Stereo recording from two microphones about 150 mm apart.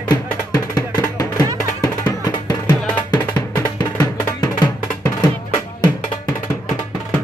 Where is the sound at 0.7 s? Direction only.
25° left (ahead or behind).